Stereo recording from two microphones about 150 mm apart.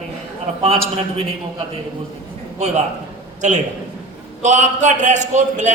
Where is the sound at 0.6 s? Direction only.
40° right (ahead or behind).